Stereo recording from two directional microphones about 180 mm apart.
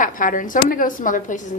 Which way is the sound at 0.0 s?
50° left (ahead or behind).